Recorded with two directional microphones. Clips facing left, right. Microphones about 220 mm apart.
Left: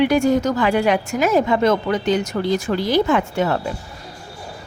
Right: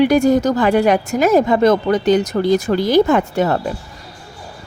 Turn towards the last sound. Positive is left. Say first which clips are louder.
# right 3 dB
turn(degrees=-40)  # may be behind; listen again after turning